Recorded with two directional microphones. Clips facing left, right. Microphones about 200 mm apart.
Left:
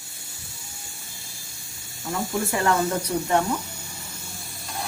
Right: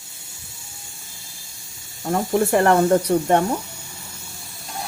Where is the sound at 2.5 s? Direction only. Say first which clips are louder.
Right 7 dB; 60° right (ahead or behind).